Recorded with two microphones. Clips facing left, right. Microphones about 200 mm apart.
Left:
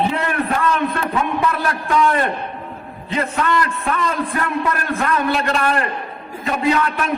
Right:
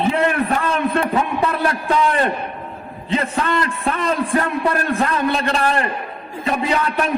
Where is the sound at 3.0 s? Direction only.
30° right (ahead or behind).